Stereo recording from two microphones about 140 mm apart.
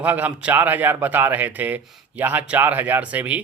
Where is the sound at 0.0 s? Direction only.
10° right (ahead or behind).